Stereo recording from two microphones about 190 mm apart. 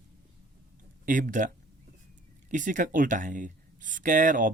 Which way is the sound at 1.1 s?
45° right (ahead or behind).